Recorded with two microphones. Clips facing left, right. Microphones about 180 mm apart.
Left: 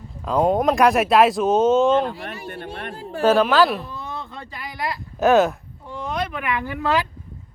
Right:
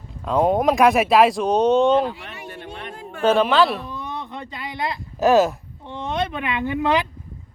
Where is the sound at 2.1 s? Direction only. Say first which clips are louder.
Left 4 dB; 35° left (ahead or behind).